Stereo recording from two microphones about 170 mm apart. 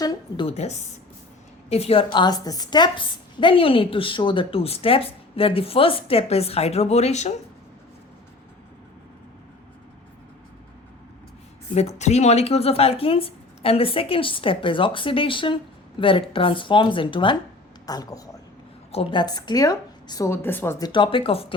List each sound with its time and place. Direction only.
0.0 s a sound: 20° left (ahead or behind)
0.4 s a woman's voice: 40° left (ahead or behind)
2.1 s a woman's voice: 25° left (ahead or behind); by 7.3 s 40° left (ahead or behind)
11.7 s a woman's voice: 40° left (ahead or behind); by 18.2 s 20° left (ahead or behind)
18.9 s a woman's voice: 35° left (ahead or behind)
19.2 s a woman's voice: 25° left (ahead or behind)